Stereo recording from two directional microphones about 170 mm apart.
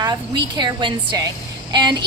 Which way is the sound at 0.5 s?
25° right (ahead or behind).